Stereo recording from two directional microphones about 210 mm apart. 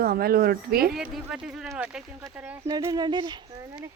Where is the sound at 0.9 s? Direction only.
Centre (ahead or behind).